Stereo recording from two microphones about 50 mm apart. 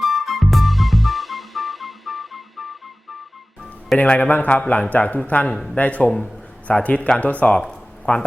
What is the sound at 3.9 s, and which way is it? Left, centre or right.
A man's voice, left.